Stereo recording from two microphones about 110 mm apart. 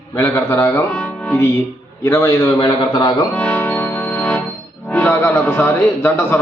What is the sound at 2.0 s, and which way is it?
Speech, 30° left (ahead or behind).